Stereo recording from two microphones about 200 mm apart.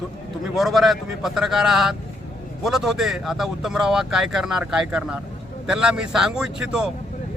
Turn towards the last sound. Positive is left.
turn(degrees=-5)  # may be behind; listen again after turning